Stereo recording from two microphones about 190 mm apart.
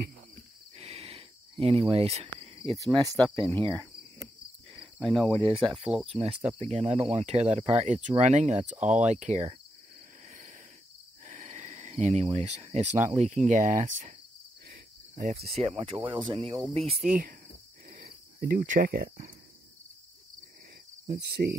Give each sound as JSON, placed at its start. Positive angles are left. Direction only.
{"t": 0.7, "sound": "cricket", "side_deg": -35}
{"t": 3.3, "sound": "speech", "side_deg": -25}
{"t": 4.9, "sound": "cricket", "side_deg": 0}
{"t": 5.4, "sound": "speech", "side_deg": -30}
{"t": 11.2, "sound": "speech", "side_deg": -40}
{"t": 15.1, "sound": "speech", "side_deg": -35}
{"t": 17.1, "sound": "speech", "side_deg": -45}
{"t": 17.9, "sound": "cricket", "side_deg": -55}
{"t": 21.2, "sound": "speech", "side_deg": -60}